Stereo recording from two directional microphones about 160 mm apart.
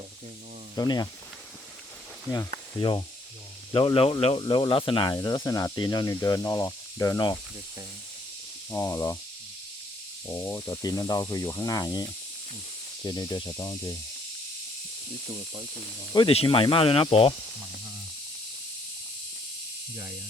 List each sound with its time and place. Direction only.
0.8 s speech: 25° left (ahead or behind)
3.7 s speech: 30° left (ahead or behind)
8.7 s speech: 20° left (ahead or behind)
10.2 s speech: 15° left (ahead or behind)
13.1 s speech: 25° left (ahead or behind)
16.1 s speech: 35° left (ahead or behind)